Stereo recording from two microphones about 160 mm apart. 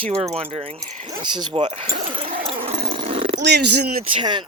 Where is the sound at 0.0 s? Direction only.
40° right (ahead or behind).